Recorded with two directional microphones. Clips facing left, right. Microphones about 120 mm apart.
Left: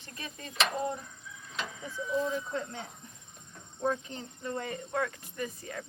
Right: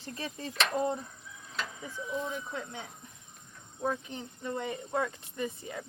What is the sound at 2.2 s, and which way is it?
Speech, 10° right (ahead or behind).